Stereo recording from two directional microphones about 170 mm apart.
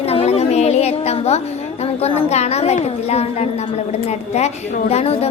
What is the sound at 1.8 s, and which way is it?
A woman's voice, 35° left (ahead or behind).